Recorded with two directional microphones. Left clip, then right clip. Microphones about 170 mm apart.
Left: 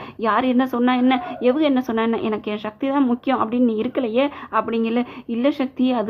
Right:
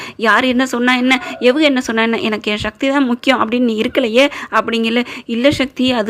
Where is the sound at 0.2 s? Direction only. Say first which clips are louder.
Right 6 dB; 20° right (ahead or behind).